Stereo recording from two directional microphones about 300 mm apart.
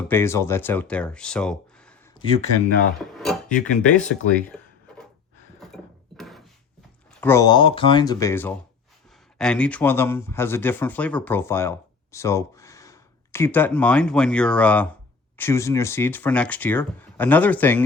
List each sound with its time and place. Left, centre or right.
0.1 s speech: centre
2.1 s speech: centre
3.8 s speech: centre
5.5 s a sound: centre
7.1 s speech: centre